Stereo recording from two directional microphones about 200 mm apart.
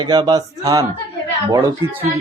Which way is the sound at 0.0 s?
20° right (ahead or behind).